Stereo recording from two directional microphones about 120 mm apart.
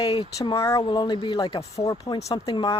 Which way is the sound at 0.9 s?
40° left (ahead or behind).